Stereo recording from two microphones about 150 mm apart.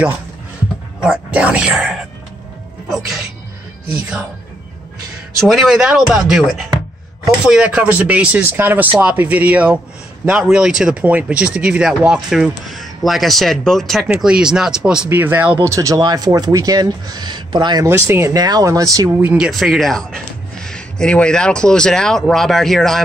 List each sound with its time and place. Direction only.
1.0 s speech: 10° right (ahead or behind)
5.4 s speech: centre (ahead or behind); by 17.9 s 30° right (ahead or behind)
17.9 s speech: 15° right (ahead or behind)
19.2 s speech: 5° right (ahead or behind)